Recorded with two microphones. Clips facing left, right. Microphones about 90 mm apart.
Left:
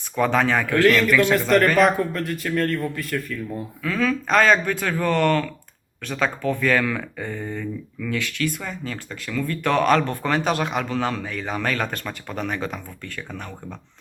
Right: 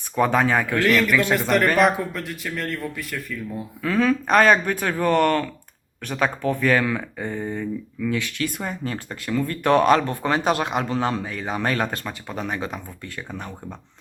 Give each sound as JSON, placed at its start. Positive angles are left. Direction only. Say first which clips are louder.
{"t": 0.2, "sound": "speech", "louder": "right 1 dB", "side_deg": -20}
{"t": 0.9, "sound": "speech", "louder": "left 3 dB", "side_deg": -5}
{"t": 3.8, "sound": "speech", "louder": "right 3 dB", "side_deg": -25}
{"t": 12.0, "sound": "speech", "louder": "left 1 dB", "side_deg": -15}